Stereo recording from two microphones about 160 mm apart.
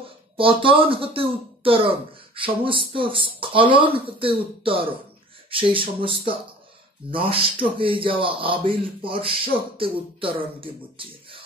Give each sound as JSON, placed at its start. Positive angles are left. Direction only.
{"t": 0.4, "sound": "a man's voice", "side_deg": -35}